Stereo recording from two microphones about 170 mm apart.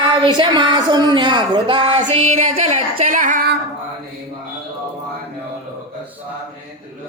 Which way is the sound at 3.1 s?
50° right (ahead or behind).